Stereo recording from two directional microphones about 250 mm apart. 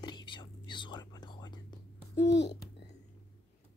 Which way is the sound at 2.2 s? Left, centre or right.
Left.